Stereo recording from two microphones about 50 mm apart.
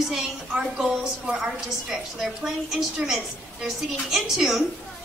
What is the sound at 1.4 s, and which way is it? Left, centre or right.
A woman's voice, centre.